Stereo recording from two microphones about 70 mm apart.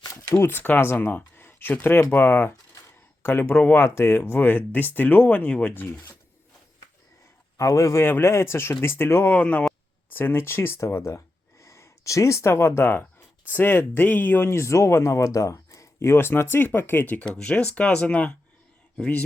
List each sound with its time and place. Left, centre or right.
0.0 s a sound: left
0.3 s speech: left
3.8 s speech: left
7.5 s a man's voice: left
8.0 s speech: left
9.3 s speech: centre
10.1 s speech: left
17.3 s speech: centre